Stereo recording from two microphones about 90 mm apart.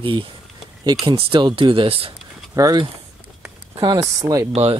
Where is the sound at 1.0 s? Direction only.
75° right (ahead or behind).